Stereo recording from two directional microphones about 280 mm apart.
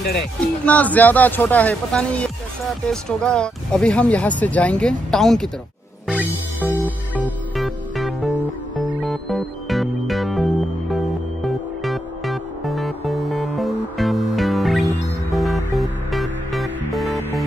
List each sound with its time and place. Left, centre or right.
0.7 s speech: centre
6.0 s music: centre